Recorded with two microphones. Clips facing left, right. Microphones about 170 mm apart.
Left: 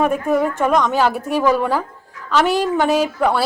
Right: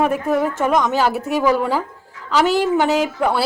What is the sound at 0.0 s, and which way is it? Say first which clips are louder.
A woman's voice: left 1 dB; 5° right (ahead or behind).